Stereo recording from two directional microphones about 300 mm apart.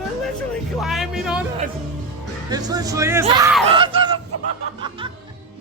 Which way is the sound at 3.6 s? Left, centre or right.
Centre.